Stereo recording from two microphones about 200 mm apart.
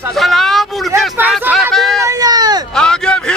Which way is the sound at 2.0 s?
20° right (ahead or behind).